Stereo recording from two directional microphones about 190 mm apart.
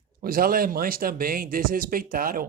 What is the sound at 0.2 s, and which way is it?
Speech, 50° right (ahead or behind).